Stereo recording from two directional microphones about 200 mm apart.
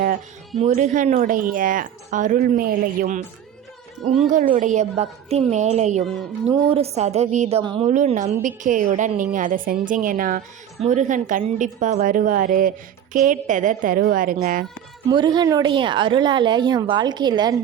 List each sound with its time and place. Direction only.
0.6 s speech: 40° right (ahead or behind)
4.5 s a woman's voice: 35° right (ahead or behind)
7.6 s speech: 25° right (ahead or behind)
7.9 s a woman's voice: 35° right (ahead or behind)
15.1 s speech: 20° right (ahead or behind)